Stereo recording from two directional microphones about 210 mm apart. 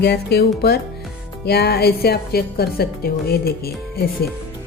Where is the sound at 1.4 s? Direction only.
50° left (ahead or behind).